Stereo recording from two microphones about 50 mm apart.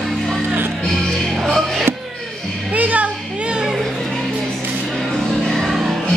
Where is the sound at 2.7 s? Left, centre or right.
Right.